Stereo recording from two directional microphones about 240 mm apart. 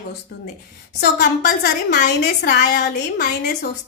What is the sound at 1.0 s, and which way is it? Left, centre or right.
A woman's voice, left.